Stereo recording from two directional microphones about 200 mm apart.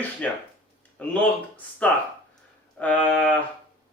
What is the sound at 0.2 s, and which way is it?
Speech, 5° left (ahead or behind).